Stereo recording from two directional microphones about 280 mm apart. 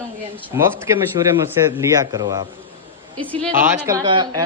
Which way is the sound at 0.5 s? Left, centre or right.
Centre.